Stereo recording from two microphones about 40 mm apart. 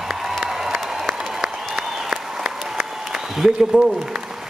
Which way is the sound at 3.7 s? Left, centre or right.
Right.